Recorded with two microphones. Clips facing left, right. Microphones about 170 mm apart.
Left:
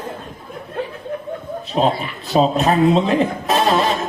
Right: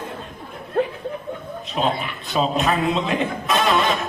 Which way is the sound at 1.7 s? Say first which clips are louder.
Left 5 dB; 35° left (ahead or behind).